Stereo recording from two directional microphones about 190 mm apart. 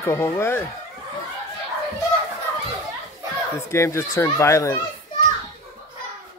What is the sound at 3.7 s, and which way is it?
Speech, 15° left (ahead or behind).